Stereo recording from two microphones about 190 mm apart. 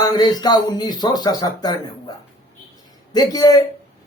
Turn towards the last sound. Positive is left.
turn(degrees=20)  # may be behind; listen again after turning